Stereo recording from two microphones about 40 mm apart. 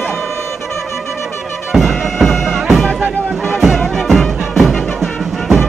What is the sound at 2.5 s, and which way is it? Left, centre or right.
Bagpipes, centre.